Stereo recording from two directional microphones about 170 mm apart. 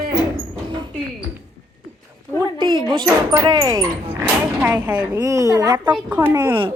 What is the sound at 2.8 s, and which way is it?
Speech, 25° right (ahead or behind).